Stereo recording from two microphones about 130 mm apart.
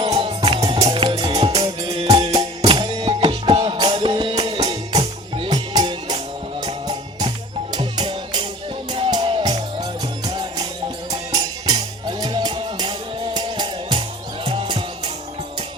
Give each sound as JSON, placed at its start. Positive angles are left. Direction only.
{"t": 0.0, "sound": "music", "side_deg": -50}
{"t": 2.0, "sound": "music", "side_deg": -50}
{"t": 2.3, "sound": "music", "side_deg": -30}
{"t": 4.4, "sound": "music", "side_deg": -45}
{"t": 4.6, "sound": "music", "side_deg": -30}
{"t": 11.7, "sound": "music", "side_deg": -40}